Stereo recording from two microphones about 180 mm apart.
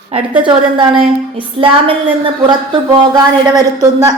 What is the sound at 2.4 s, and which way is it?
Speech, 25° right (ahead or behind).